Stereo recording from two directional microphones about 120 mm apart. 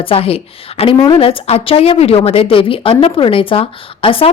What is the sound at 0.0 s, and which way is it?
A woman's voice, 50° left (ahead or behind).